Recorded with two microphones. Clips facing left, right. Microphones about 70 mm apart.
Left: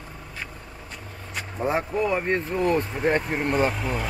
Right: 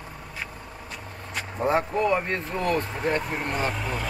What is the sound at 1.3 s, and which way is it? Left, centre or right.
Speech, centre.